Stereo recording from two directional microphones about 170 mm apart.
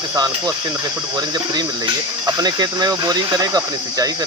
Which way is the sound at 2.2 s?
25° right (ahead or behind).